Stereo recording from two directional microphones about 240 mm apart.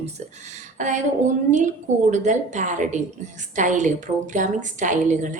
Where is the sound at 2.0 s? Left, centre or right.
Right.